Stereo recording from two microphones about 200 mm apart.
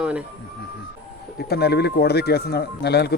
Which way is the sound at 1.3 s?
55° left (ahead or behind).